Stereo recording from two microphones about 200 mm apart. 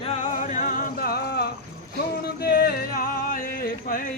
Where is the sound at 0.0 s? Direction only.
35° left (ahead or behind).